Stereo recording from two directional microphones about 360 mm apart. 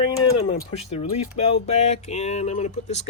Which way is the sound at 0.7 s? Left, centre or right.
Centre.